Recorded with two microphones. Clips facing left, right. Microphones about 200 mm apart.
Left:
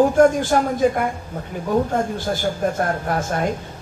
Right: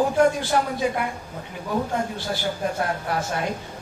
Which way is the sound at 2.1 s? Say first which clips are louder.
Left 5 dB; 45° left (ahead or behind).